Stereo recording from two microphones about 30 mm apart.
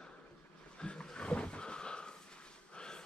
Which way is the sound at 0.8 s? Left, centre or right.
Left.